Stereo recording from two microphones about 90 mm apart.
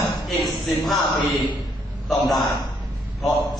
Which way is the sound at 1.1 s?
55° left (ahead or behind).